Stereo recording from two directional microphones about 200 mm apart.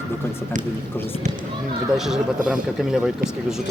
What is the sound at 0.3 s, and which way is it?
Speech, 10° left (ahead or behind).